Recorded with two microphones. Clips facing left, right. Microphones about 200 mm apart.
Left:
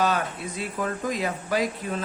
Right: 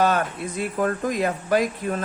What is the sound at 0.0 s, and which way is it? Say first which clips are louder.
Speech: right 4 dB; 50° right (ahead or behind).